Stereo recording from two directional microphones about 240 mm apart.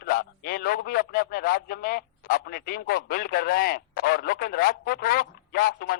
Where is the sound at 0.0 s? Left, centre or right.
Left.